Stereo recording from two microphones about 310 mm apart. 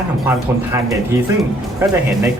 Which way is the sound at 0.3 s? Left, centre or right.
Centre.